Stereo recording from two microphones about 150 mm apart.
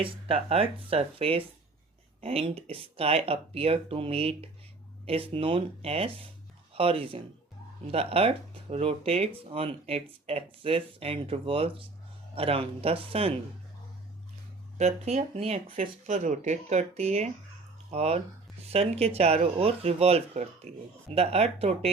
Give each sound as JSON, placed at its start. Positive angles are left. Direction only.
{"t": 0.0, "sound": "speech", "side_deg": -40}
{"t": 14.8, "sound": "speech", "side_deg": -50}
{"t": 15.8, "sound": "speech", "side_deg": -55}